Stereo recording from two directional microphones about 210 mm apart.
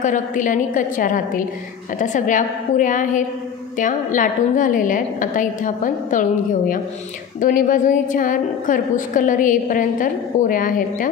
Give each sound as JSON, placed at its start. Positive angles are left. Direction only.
{"t": 0.0, "sound": "a woman's voice", "side_deg": 40}
{"t": 7.3, "sound": "a woman's voice", "side_deg": 40}